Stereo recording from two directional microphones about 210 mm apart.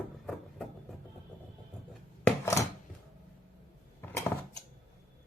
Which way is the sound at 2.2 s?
15° left (ahead or behind).